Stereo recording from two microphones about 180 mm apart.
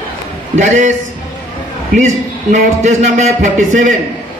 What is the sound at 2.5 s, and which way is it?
A man's voice, 40° right (ahead or behind).